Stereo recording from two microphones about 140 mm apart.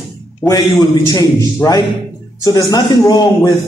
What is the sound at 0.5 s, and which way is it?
A man's voice, 25° left (ahead or behind).